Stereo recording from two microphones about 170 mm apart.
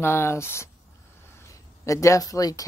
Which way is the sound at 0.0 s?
15° left (ahead or behind).